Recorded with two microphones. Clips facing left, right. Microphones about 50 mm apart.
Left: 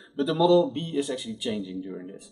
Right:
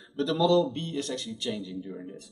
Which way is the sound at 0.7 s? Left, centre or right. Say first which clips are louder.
Left 4 dB; centre.